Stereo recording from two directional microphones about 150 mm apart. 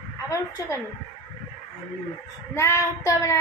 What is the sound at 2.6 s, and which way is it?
Speech, 20° left (ahead or behind).